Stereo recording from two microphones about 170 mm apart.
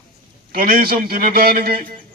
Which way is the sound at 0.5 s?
60° right (ahead or behind).